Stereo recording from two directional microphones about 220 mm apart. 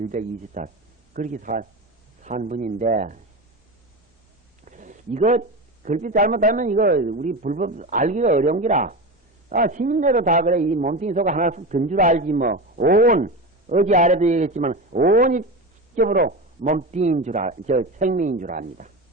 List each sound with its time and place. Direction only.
0.1 s a man's voice: 35° right (ahead or behind)
4.6 s a man's voice: 35° right (ahead or behind)